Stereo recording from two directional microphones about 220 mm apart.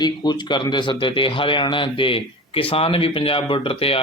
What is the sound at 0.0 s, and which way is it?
A man's voice, 20° left (ahead or behind).